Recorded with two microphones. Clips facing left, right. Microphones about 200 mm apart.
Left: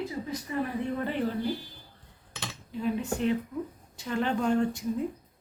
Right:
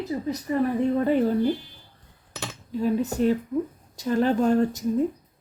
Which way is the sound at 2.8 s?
40° right (ahead or behind).